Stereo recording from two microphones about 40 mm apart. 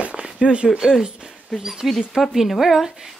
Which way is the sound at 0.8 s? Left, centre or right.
Centre.